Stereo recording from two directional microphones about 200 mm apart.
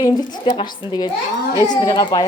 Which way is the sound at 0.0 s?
20° left (ahead or behind).